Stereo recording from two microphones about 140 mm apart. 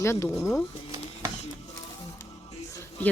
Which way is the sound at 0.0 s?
20° left (ahead or behind).